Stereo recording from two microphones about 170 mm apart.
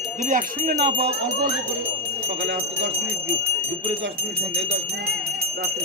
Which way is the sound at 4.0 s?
90° right.